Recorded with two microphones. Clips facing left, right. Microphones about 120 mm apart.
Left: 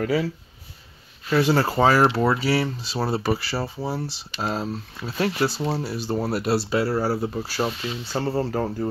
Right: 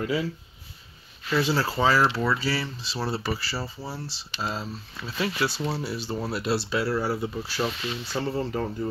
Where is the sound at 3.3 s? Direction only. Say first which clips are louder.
Left 6 dB; 55° left (ahead or behind).